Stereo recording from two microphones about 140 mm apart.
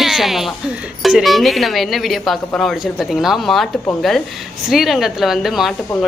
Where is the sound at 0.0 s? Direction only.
Centre (ahead or behind).